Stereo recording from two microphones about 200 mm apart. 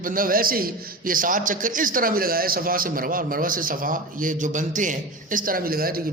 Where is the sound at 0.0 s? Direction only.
45° right (ahead or behind).